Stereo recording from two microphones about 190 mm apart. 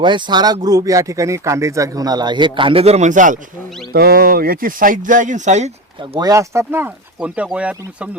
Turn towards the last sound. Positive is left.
turn(degrees=-5)  # may be behind; listen again after turning